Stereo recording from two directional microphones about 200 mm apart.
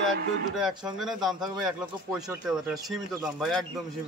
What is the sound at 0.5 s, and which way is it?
Speech, centre (ahead or behind).